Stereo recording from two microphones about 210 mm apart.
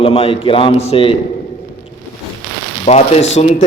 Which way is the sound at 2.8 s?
30° left (ahead or behind).